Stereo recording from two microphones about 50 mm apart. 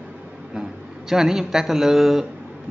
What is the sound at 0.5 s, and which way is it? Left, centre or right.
Speech, centre.